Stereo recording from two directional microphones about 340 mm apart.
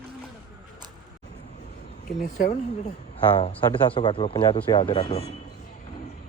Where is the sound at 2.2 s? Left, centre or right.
Left.